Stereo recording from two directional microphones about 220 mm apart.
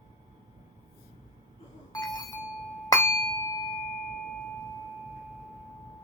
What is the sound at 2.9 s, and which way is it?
Glass, 10° left (ahead or behind).